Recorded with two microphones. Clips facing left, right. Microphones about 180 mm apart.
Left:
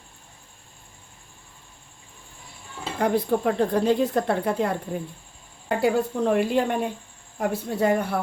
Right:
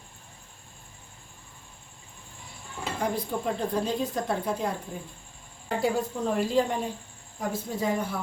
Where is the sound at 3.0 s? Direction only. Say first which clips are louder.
Left 8 dB; 65° left (ahead or behind).